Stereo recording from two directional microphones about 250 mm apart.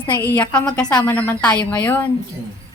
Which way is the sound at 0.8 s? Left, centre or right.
Centre.